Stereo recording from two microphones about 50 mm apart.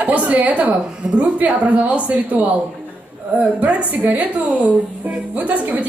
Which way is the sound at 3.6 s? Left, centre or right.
Right.